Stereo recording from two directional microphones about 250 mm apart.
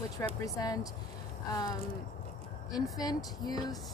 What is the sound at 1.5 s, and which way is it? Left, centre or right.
Speech, centre.